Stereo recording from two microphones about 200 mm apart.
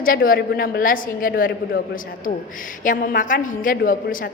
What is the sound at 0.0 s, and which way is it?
A woman's voice, 45° left (ahead or behind).